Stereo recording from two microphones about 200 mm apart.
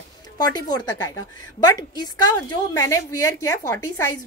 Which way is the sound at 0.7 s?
20° left (ahead or behind).